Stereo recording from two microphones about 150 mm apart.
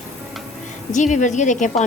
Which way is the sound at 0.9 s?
55° left (ahead or behind).